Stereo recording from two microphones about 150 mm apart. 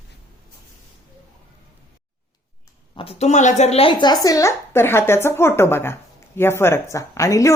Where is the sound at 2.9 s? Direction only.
40° left (ahead or behind).